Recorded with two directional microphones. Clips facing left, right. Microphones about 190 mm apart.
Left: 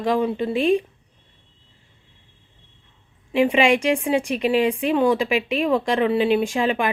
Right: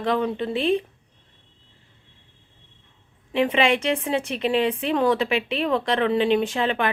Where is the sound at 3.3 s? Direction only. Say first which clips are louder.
Left 3 dB; 10° left (ahead or behind).